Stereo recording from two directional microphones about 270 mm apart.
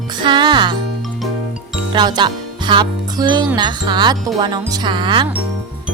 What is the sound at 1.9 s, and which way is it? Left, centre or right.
Speech, centre.